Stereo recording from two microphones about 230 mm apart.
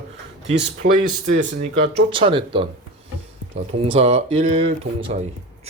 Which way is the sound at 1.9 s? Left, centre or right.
Right.